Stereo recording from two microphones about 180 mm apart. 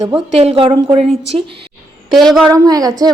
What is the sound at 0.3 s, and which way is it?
Speech, 35° right (ahead or behind).